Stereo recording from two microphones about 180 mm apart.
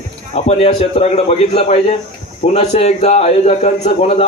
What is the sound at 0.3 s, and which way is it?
A man's voice, 35° left (ahead or behind).